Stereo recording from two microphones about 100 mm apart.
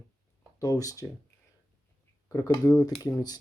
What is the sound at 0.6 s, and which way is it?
Speech, 35° left (ahead or behind).